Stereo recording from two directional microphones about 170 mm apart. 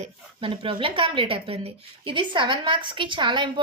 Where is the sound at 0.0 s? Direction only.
30° right (ahead or behind).